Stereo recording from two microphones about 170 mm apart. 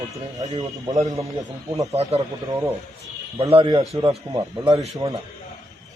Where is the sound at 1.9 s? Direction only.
40° right (ahead or behind).